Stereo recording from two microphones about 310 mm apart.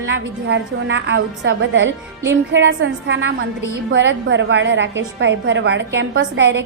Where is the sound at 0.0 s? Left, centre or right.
Right.